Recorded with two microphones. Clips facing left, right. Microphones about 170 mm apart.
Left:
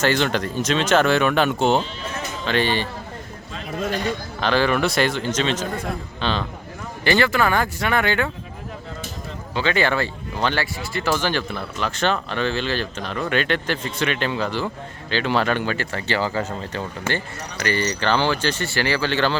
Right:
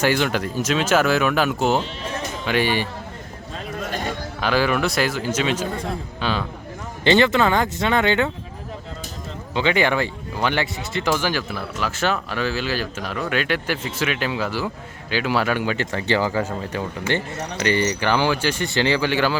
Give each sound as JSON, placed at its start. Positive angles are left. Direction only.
{"t": 0.0, "sound": "speech", "side_deg": -10}
{"t": 3.5, "sound": "a sound", "side_deg": -50}
{"t": 4.4, "sound": "a man's voice", "side_deg": -10}
{"t": 7.0, "sound": "speech", "side_deg": -20}
{"t": 9.6, "sound": "speech", "side_deg": -15}